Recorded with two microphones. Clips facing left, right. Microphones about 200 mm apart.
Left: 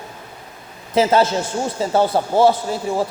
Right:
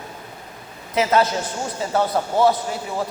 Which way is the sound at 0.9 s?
30° left (ahead or behind).